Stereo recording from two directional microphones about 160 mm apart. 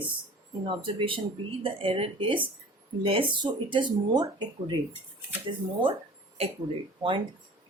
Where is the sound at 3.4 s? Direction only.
30° right (ahead or behind).